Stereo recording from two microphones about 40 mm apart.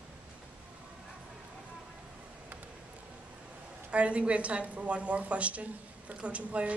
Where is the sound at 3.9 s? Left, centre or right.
Right.